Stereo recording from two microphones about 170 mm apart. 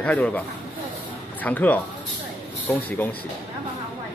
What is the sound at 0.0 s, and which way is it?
Speech, 10° left (ahead or behind).